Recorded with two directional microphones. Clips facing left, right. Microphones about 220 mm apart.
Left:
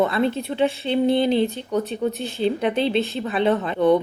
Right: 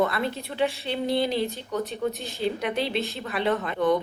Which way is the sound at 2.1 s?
15° right (ahead or behind).